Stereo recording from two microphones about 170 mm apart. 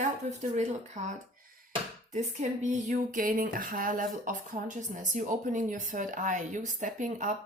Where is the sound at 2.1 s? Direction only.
45° right (ahead or behind).